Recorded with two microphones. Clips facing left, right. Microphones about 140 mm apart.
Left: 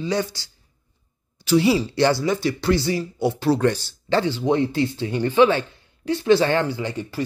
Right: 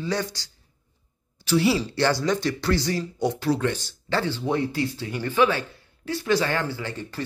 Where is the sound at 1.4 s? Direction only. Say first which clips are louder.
Left 4 dB; 15° left (ahead or behind).